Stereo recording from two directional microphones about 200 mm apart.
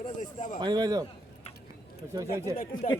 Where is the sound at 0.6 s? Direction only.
20° right (ahead or behind).